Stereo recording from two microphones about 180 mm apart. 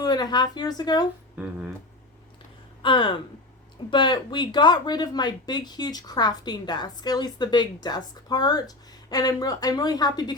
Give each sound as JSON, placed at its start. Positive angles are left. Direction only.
{"t": 0.0, "sound": "speech", "side_deg": 25}
{"t": 2.8, "sound": "speech", "side_deg": 25}